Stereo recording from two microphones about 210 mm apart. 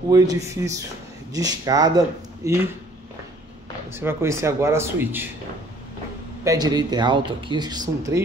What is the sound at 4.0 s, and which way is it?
Speech, 10° right (ahead or behind).